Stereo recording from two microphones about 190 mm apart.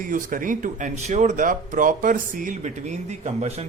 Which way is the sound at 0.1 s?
45° right (ahead or behind).